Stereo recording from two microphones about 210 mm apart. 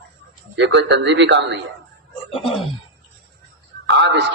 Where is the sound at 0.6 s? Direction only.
55° right (ahead or behind).